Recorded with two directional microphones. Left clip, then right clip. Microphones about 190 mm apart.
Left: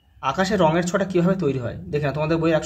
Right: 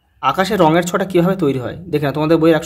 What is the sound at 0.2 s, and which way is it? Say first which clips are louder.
Speech: right 6 dB; 40° right (ahead or behind).